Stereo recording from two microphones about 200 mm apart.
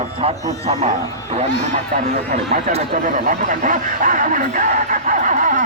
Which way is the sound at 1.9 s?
35° right (ahead or behind).